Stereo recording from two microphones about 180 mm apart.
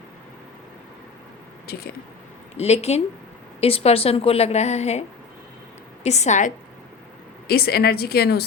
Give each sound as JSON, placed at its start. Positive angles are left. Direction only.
{"t": 1.7, "sound": "a woman's voice", "side_deg": 60}
{"t": 2.6, "sound": "a woman's voice", "side_deg": 35}
{"t": 7.4, "sound": "a woman's voice", "side_deg": 60}